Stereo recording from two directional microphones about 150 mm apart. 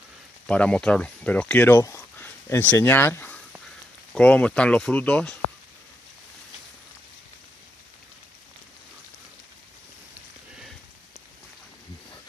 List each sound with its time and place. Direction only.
0.5 s speech: 5° left (ahead or behind)